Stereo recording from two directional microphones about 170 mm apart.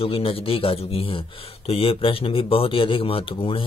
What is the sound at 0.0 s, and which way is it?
A man's voice, 35° left (ahead or behind).